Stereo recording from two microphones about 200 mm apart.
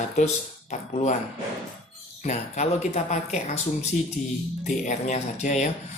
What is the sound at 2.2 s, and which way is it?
Speech, 35° left (ahead or behind).